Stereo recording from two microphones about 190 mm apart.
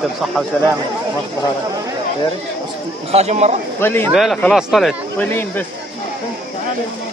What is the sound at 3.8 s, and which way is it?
Speech, 10° left (ahead or behind).